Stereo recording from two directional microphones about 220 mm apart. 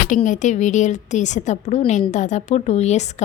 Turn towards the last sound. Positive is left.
turn(degrees=30)  # may be behind; listen again after turning